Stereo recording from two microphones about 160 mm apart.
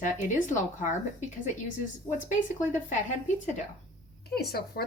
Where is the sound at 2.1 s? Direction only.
50° left (ahead or behind).